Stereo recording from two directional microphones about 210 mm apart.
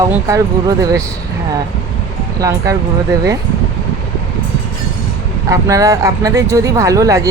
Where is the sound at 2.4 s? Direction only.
15° right (ahead or behind).